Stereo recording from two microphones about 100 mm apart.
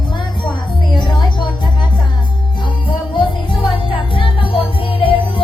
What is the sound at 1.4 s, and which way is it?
Music, 50° left (ahead or behind).